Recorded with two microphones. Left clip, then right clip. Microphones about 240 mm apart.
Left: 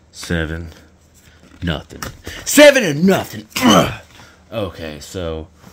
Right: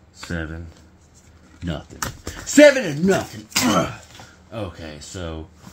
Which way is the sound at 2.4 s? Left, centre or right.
Left.